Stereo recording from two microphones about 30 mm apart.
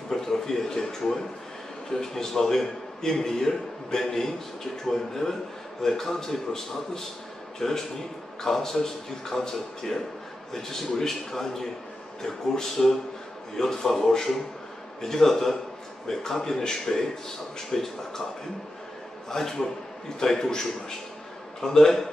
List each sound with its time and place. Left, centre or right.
0.1 s a man's voice: centre
19.2 s a man's voice: centre